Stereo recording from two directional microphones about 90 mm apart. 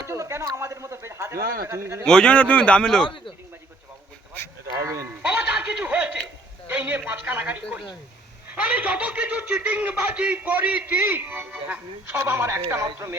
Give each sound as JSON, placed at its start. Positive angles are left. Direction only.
{"t": 0.0, "sound": "speech", "side_deg": -30}
{"t": 2.0, "sound": "a man's voice", "side_deg": 10}
{"t": 4.8, "sound": "speech", "side_deg": -35}
{"t": 5.0, "sound": "music", "side_deg": -15}
{"t": 6.7, "sound": "a man's voice", "side_deg": -20}